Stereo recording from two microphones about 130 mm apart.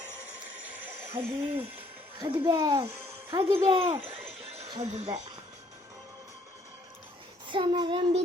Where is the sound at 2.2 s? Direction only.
30° right (ahead or behind).